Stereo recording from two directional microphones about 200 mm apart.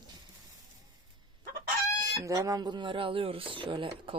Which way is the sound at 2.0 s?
15° right (ahead or behind).